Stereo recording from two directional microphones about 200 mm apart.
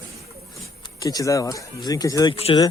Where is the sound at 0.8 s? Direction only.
20° left (ahead or behind).